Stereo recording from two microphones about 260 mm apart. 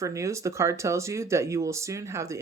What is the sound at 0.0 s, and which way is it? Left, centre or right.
Speech, centre.